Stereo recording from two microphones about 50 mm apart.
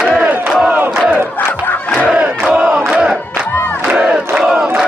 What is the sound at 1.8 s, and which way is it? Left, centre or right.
Crowd, left.